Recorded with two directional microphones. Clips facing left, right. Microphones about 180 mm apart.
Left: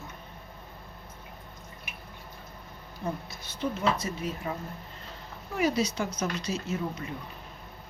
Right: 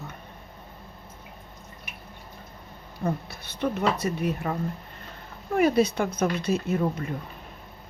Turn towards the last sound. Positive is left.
turn(degrees=-55)  # may be behind; listen again after turning